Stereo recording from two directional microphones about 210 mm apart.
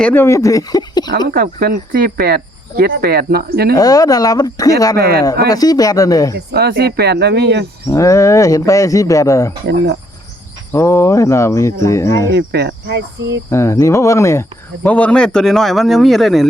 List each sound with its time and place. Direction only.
0.0 s speech: 10° left (ahead or behind)
1.3 s speech: 45° right (ahead or behind)
3.8 s speech: 15° left (ahead or behind)
4.9 s speech: 45° right (ahead or behind)
5.5 s speech: 15° left (ahead or behind)
6.3 s speech: 50° right (ahead or behind)
7.9 s speech: 15° left (ahead or behind)
9.6 s speech: 55° right (ahead or behind)
10.7 s speech: 10° left (ahead or behind)
12.3 s speech: 50° right (ahead or behind)
13.5 s speech: 15° left (ahead or behind)